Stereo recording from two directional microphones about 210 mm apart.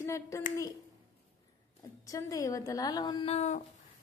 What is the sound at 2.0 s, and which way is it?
A woman's voice, 15° left (ahead or behind).